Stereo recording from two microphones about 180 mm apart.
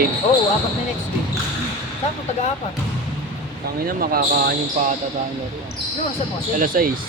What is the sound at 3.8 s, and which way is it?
Speech, 55° right (ahead or behind).